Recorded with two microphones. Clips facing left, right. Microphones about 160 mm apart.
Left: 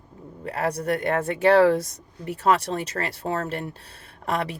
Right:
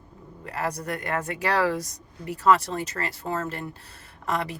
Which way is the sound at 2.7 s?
35° left (ahead or behind).